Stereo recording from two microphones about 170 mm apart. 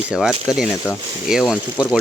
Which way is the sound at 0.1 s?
5° right (ahead or behind).